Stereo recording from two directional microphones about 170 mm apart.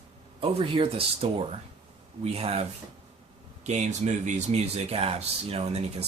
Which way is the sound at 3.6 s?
40° right (ahead or behind).